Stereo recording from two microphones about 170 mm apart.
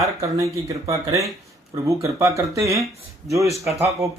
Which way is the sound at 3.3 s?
20° right (ahead or behind).